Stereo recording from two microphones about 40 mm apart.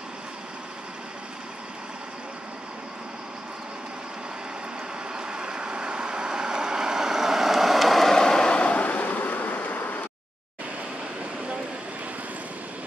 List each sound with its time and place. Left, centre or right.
5.1 s vehicle: right; by 8.1 s centre
8.1 s vehicle: centre
8.5 s vehicle: left